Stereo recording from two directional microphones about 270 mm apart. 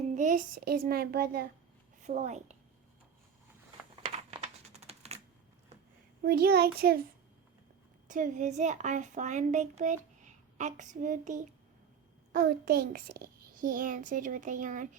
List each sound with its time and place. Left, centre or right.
0.1 s a child's voice: right
4.0 s typing: right
6.2 s a child's voice: right
8.0 s a woman's voice: right